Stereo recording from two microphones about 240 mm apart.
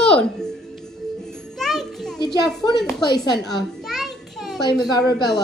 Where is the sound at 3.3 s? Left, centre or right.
Centre.